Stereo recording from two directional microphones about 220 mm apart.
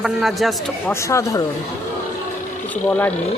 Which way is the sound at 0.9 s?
15° left (ahead or behind).